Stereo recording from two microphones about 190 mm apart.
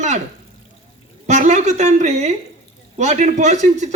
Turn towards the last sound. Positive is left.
turn(degrees=-40)  # may be behind; listen again after turning